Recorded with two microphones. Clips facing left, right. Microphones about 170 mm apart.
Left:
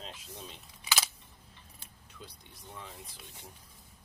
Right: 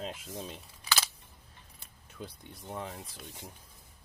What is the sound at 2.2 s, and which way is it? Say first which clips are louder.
Speech: right 7 dB; 60° right (ahead or behind).